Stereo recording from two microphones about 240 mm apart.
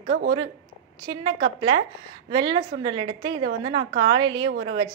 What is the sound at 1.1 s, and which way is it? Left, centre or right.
A woman's voice, centre.